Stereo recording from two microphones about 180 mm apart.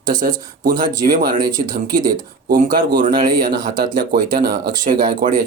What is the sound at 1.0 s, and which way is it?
Speech, 55° right (ahead or behind).